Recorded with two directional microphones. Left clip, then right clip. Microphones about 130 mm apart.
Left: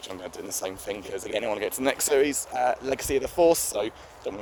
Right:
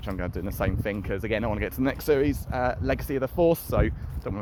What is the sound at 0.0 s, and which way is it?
Speech, 25° left (ahead or behind).